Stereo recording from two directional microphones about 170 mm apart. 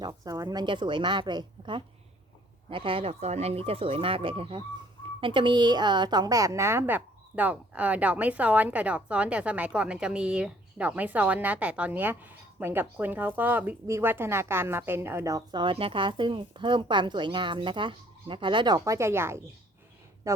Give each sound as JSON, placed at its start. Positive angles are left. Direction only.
{"t": 0.0, "sound": "a woman's voice", "side_deg": -25}